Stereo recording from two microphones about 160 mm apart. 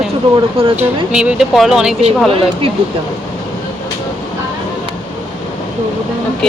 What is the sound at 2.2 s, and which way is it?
Speech, 35° right (ahead or behind).